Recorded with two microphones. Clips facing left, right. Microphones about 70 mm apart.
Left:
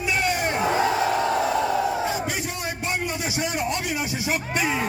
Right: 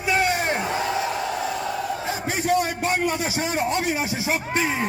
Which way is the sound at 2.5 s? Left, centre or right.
Right.